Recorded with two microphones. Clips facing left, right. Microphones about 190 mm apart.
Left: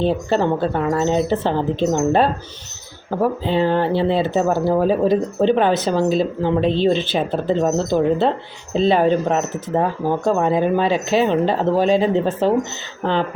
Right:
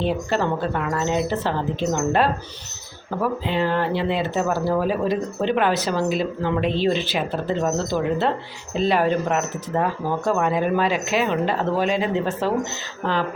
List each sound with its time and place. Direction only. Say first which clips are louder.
0.0 s speech: left 4 dB; 30° left (ahead or behind)